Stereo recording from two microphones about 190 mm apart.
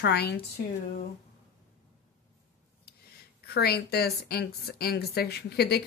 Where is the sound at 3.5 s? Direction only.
55° left (ahead or behind).